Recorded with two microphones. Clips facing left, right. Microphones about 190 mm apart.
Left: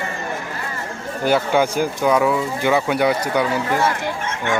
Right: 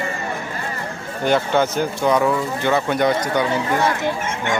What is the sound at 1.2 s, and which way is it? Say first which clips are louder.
Speech: even; 10° left (ahead or behind).